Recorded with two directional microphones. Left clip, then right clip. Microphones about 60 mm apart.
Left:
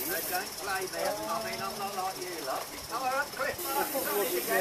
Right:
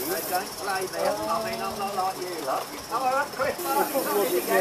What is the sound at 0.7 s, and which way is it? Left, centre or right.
Speech, left.